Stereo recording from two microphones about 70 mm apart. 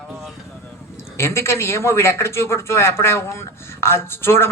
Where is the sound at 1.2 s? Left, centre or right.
Left.